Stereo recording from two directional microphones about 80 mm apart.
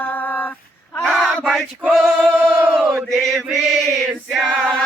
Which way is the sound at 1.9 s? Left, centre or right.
Centre.